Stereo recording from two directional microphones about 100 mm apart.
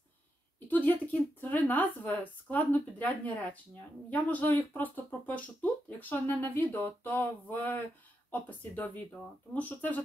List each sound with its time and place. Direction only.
0.7 s speech: 15° left (ahead or behind)